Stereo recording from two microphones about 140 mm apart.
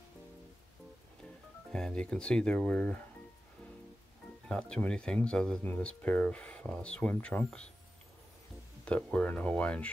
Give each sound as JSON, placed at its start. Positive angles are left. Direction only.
{"t": 1.7, "sound": "speech", "side_deg": 5}
{"t": 4.5, "sound": "speech", "side_deg": 5}
{"t": 8.8, "sound": "speech", "side_deg": 10}